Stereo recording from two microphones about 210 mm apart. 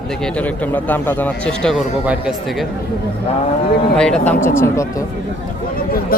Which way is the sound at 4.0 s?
5° left (ahead or behind).